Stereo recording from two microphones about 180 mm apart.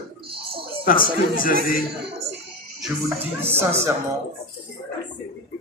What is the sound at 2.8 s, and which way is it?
Speech, 10° right (ahead or behind).